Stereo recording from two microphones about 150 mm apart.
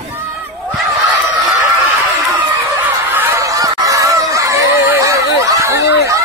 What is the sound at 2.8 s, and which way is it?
Snicker, 15° right (ahead or behind).